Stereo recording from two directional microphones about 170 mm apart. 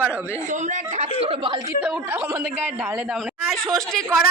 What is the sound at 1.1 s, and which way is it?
Speech, 30° right (ahead or behind).